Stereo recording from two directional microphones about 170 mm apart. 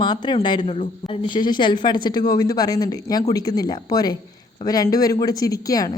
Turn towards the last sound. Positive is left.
turn(degrees=20)  # may be behind; listen again after turning